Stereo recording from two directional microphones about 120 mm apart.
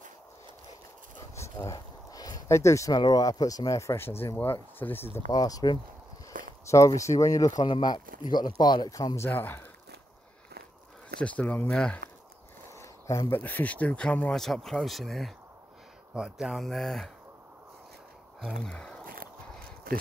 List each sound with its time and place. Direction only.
1.3 s a sound: 25° left (ahead or behind)
3.0 s speech: 35° left (ahead or behind); by 5.0 s 15° left (ahead or behind)
5.3 s speech: 35° left (ahead or behind)
9.2 s speech: 15° left (ahead or behind)
11.1 s speech: 10° left (ahead or behind)
12.7 s a sound: 25° left (ahead or behind)
13.4 s speech: 15° left (ahead or behind)
18.4 s speech: 5° left (ahead or behind)